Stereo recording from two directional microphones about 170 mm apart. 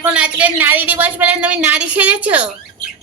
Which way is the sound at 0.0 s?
5° right (ahead or behind).